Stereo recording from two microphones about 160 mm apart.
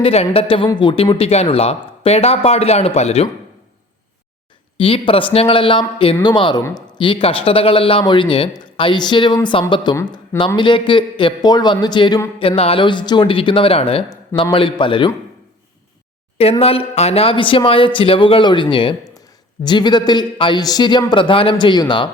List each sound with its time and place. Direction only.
0.0 s speech: 40° left (ahead or behind)
4.8 s a man's voice: 35° left (ahead or behind)
6.6 s speech: 15° left (ahead or behind)
6.9 s speech: 30° left (ahead or behind)
14.1 s a man's voice: 25° left (ahead or behind)
16.4 s a man's voice: 40° left (ahead or behind)